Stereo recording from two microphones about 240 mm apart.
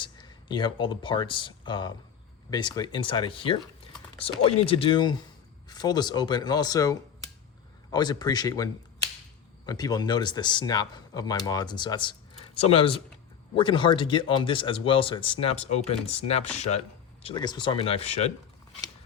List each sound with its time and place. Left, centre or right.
0.0 s speech: centre